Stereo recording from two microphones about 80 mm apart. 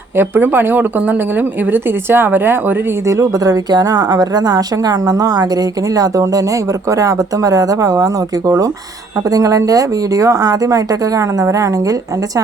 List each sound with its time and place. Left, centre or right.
0.2 s a woman's voice: right
3.1 s a woman's voice: right